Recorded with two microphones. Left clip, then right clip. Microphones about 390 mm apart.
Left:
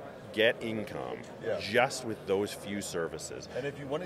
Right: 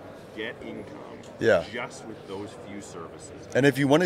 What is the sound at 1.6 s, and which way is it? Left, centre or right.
Speech, left.